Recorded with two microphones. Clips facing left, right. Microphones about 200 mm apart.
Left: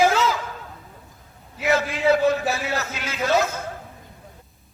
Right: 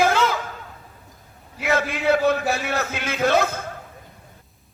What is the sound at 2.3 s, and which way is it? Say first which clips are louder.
A man's voice: right 1 dB; 60° right (ahead or behind).